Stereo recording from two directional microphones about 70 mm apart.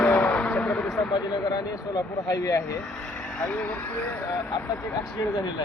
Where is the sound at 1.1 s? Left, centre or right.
Left.